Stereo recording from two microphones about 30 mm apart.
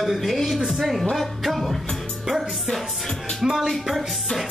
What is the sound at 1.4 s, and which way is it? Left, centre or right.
Music, centre.